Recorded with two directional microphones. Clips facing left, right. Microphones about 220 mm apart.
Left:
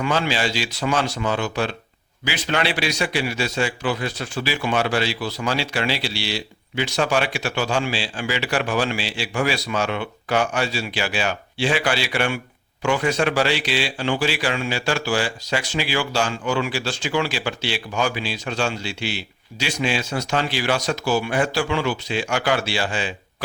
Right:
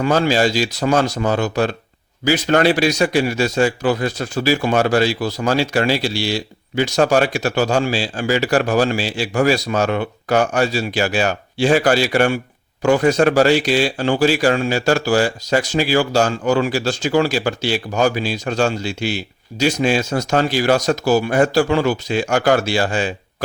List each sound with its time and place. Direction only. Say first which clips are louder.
0.0 s a man's voice: right 7 dB; 45° right (ahead or behind)